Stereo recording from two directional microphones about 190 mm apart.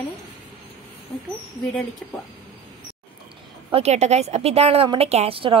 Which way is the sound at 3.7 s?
35° right (ahead or behind).